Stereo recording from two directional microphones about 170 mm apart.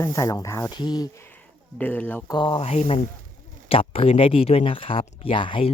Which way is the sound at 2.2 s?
25° left (ahead or behind).